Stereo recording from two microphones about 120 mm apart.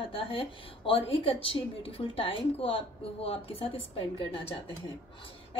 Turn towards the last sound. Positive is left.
turn(degrees=45)  # may be behind; listen again after turning